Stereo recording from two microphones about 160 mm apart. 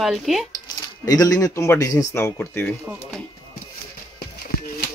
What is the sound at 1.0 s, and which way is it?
Speech, 20° left (ahead or behind).